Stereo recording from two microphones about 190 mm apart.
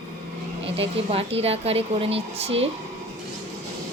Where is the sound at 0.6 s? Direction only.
30° right (ahead or behind).